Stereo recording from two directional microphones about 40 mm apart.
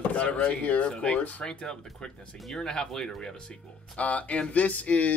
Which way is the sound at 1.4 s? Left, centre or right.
Centre.